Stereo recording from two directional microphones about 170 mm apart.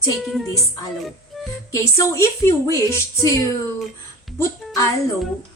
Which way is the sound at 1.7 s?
15° left (ahead or behind).